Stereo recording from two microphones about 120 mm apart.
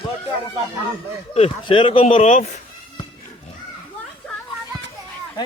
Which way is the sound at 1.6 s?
45° left (ahead or behind).